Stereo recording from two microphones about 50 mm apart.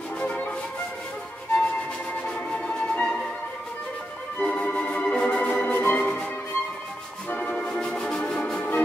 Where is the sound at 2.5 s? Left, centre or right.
Left.